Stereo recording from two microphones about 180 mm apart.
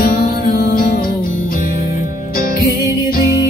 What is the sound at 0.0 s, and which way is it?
Music, 50° left (ahead or behind).